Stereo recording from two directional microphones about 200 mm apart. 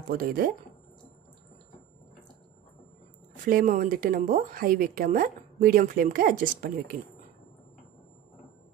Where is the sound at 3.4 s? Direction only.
45° right (ahead or behind).